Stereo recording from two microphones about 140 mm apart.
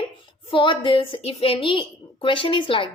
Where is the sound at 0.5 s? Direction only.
35° left (ahead or behind).